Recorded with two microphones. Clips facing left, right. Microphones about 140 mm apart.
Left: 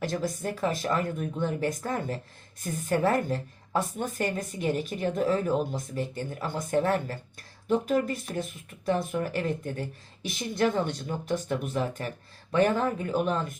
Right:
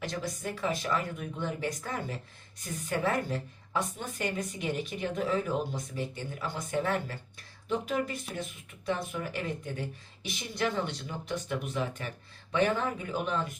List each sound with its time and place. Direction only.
0.0 s a woman's voice: 45° left (ahead or behind)